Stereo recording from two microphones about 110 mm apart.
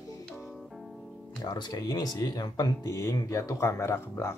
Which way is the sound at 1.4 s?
40° left (ahead or behind).